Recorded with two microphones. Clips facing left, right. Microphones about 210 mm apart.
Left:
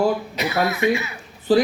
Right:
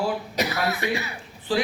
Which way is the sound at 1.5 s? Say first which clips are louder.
Left 8 dB; 40° left (ahead or behind).